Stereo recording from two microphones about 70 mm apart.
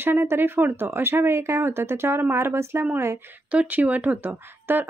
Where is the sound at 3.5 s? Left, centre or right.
Right.